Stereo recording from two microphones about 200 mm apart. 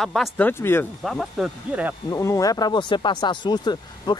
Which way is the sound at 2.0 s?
15° left (ahead or behind).